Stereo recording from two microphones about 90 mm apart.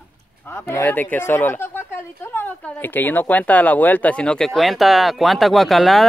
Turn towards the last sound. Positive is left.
turn(degrees=0)  # may be behind; listen again after turning